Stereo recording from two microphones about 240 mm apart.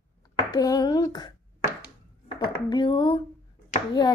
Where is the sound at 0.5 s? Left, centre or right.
Centre.